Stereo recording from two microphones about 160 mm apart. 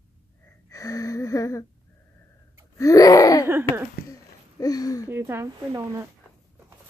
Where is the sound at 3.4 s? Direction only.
15° right (ahead or behind).